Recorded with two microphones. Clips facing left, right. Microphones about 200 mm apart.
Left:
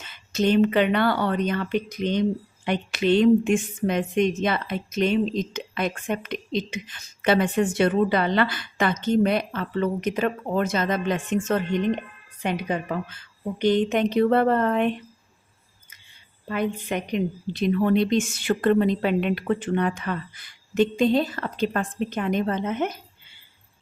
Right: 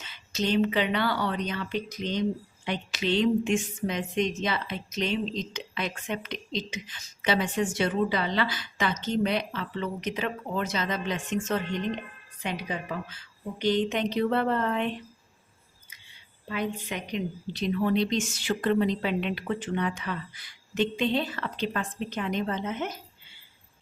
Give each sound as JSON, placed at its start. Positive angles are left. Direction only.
{"t": 0.0, "sound": "a woman's voice", "side_deg": 50}
{"t": 16.5, "sound": "a woman's voice", "side_deg": 55}